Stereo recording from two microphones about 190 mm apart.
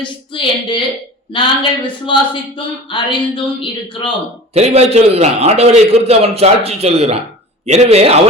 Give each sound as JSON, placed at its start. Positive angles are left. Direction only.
{"t": 0.0, "sound": "speech", "side_deg": 25}
{"t": 4.5, "sound": "a man's voice", "side_deg": -35}